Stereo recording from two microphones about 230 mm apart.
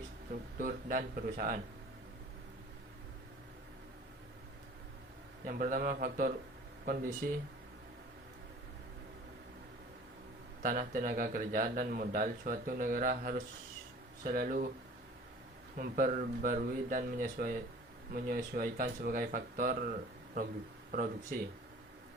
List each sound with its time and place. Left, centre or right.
0.6 s a man's voice: right
5.5 s a man's voice: right
10.6 s a man's voice: right
15.8 s a man's voice: right